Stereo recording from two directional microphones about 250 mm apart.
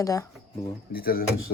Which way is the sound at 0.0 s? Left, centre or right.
Centre.